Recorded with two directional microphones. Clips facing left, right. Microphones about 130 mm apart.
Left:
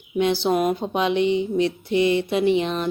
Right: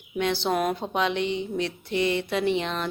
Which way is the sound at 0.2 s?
15° left (ahead or behind).